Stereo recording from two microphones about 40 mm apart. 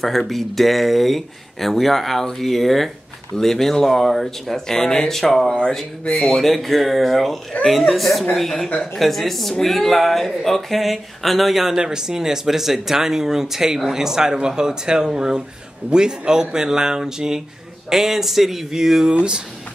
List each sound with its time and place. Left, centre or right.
0.3 s speech: centre
5.2 s speech: centre
7.5 s speech: left
7.9 s speech: centre
19.0 s speech: right